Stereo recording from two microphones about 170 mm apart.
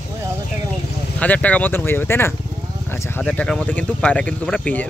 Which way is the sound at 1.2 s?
10° left (ahead or behind).